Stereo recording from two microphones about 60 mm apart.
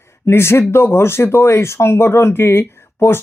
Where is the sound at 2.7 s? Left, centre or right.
Left.